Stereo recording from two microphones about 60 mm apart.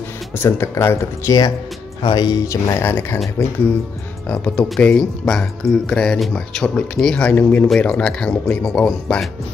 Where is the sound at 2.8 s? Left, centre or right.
Left.